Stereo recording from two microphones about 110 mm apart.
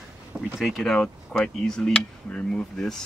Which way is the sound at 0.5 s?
Centre (ahead or behind).